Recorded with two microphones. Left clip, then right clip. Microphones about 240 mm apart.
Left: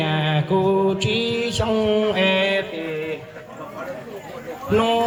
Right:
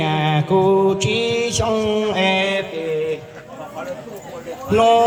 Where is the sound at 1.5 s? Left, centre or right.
Right.